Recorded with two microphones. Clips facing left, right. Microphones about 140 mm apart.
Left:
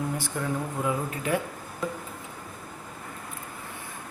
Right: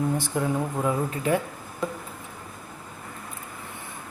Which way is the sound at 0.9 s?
35° right (ahead or behind).